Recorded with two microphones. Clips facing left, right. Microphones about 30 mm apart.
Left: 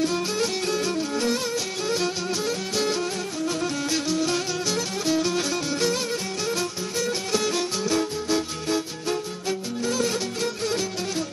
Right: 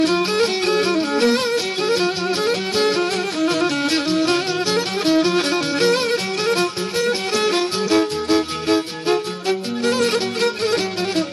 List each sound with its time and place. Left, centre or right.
0.0 s music: right